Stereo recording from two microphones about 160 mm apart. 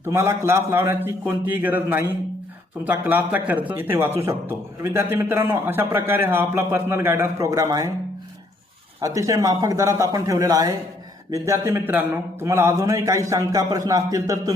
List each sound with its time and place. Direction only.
0.0 s a man's voice: 15° right (ahead or behind)
9.1 s a man's voice: 20° right (ahead or behind)